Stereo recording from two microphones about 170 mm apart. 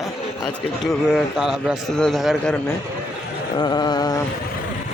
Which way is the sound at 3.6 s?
25° left (ahead or behind).